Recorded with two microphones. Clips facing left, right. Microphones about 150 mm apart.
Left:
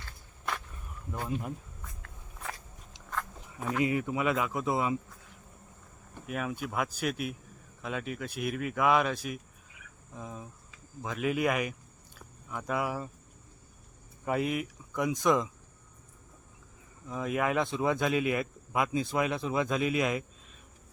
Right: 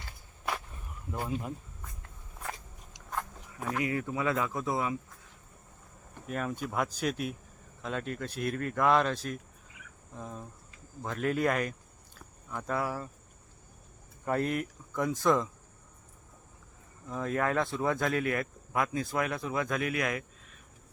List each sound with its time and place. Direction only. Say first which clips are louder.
1.1 s speech: even; centre (ahead or behind)
3.8 s speech: left 2 dB; 15° left (ahead or behind)
6.2 s speech: even; 5° left (ahead or behind)
12.1 s a sound: even; 5° left (ahead or behind)
14.3 s speech: even; 10° left (ahead or behind)
17.1 s speech: even; 10° left (ahead or behind)